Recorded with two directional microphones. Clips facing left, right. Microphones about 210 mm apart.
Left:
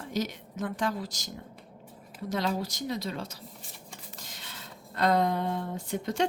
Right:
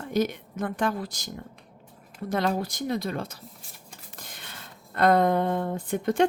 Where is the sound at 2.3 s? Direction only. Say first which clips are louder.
Right 4 dB; 55° right (ahead or behind).